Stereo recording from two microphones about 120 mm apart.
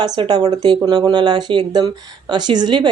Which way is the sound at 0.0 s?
35° right (ahead or behind).